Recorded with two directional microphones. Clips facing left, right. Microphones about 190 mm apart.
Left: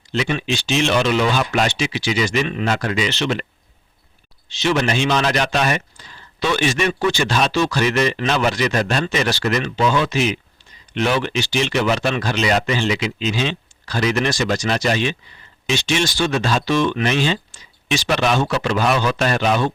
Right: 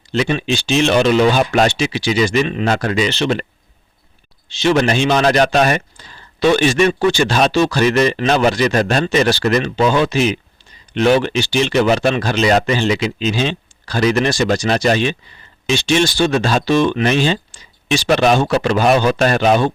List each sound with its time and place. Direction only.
0.1 s a man's voice: 35° right (ahead or behind)
2.6 s a man's voice: 40° right (ahead or behind)
4.4 s a man's voice: 30° right (ahead or behind)